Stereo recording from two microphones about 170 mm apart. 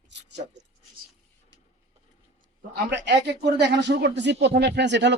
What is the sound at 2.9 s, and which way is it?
Speech, 90° right.